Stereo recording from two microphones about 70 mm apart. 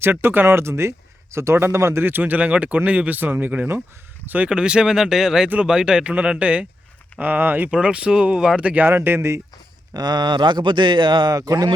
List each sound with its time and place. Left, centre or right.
0.0 s speech: right
4.4 s speech: centre
7.7 s speech: centre
8.6 s speech: right
8.9 s speech: right
9.9 s speech: right
11.2 s a man's voice: right